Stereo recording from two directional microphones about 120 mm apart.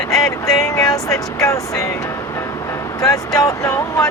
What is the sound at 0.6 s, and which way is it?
Speech, 25° left (ahead or behind).